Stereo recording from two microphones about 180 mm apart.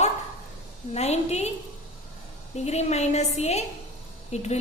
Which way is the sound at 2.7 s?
35° left (ahead or behind).